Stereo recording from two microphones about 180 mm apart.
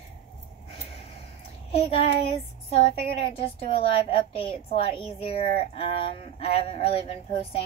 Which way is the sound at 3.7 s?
30° left (ahead or behind).